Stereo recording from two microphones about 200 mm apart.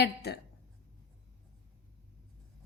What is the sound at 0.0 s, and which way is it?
Speech, 50° left (ahead or behind).